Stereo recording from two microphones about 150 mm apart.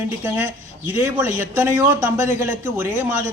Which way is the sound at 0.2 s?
15° right (ahead or behind).